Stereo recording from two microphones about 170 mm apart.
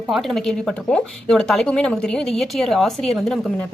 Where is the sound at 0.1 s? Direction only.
Centre (ahead or behind).